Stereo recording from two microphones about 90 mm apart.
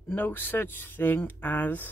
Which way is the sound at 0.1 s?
20° left (ahead or behind).